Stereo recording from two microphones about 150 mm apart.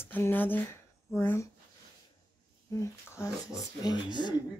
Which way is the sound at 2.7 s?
20° left (ahead or behind).